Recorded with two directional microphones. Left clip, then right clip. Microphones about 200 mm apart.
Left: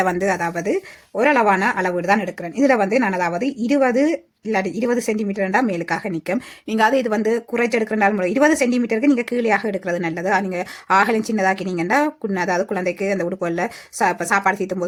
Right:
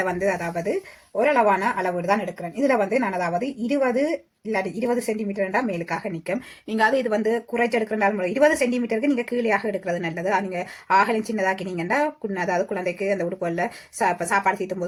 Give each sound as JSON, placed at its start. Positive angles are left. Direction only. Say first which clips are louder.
{"t": 0.0, "sound": "speech", "louder": "left 4 dB", "side_deg": 40}